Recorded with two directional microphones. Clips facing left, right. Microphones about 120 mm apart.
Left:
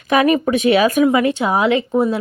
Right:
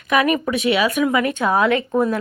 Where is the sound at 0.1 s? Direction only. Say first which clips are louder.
Left 4 dB; 30° left (ahead or behind).